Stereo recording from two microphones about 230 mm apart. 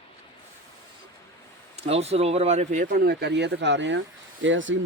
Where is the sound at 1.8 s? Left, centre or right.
Right.